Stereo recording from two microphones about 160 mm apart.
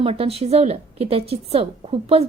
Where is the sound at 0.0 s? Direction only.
35° right (ahead or behind).